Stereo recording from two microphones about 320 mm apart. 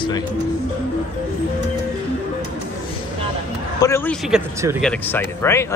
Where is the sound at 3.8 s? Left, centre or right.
Centre.